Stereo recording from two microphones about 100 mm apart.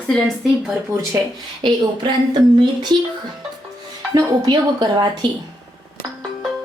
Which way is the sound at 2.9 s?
50° right (ahead or behind).